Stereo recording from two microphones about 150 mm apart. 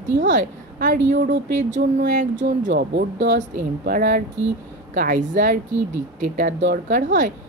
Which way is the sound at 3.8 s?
70° right (ahead or behind).